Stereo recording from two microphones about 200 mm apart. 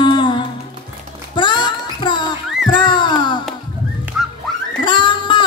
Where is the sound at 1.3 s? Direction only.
20° left (ahead or behind).